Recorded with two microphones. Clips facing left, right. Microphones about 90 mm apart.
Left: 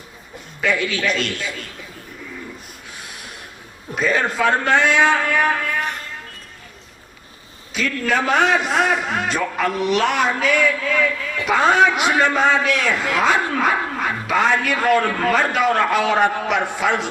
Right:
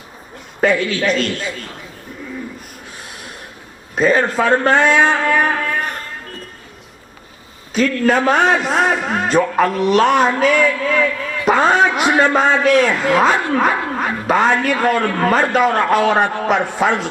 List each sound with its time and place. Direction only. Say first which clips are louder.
0.6 s a man's voice: right 5 dB; 40° right (ahead or behind)
3.9 s a man's voice: right 5 dB; 40° right (ahead or behind)
7.7 s a man's voice: right 6 dB; 40° right (ahead or behind)